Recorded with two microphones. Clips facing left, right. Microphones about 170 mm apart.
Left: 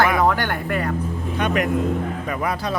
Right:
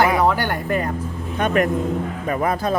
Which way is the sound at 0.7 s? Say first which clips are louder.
Right 2 dB; 20° right (ahead or behind).